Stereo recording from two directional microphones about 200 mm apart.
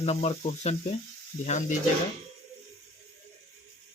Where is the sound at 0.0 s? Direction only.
30° left (ahead or behind).